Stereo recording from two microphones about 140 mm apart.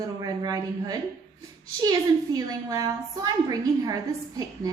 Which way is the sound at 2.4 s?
25° right (ahead or behind).